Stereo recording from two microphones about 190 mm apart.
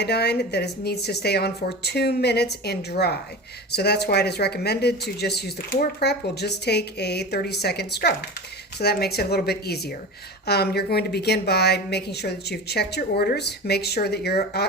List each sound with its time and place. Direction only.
0.0 s speech: 60° left (ahead or behind)